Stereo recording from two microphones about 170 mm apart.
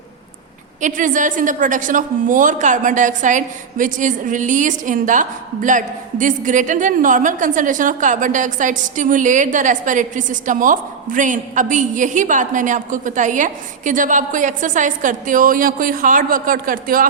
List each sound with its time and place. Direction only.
0.8 s a woman's voice: 50° right (ahead or behind)